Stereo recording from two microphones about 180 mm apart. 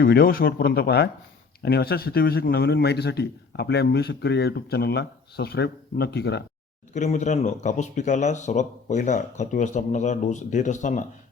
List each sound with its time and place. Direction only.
0.0 s a man's voice: 55° left (ahead or behind)
6.9 s speech: 40° left (ahead or behind)